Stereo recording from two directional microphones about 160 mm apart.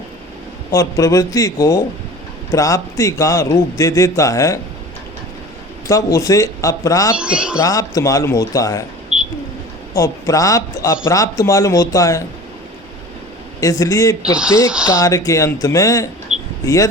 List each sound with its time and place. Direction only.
0.7 s speech: 20° left (ahead or behind)
6.1 s speech: 20° left (ahead or behind)
7.2 s speech: 5° right (ahead or behind)
7.6 s speech: 20° left (ahead or behind)
9.1 s a sound: 5° right (ahead or behind)
9.9 s speech: 20° left (ahead or behind)
13.6 s speech: 20° left (ahead or behind)
16.3 s a sound: 45° right (ahead or behind)